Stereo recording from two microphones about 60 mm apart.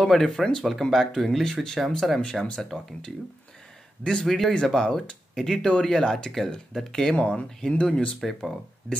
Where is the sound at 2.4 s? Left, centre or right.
Centre.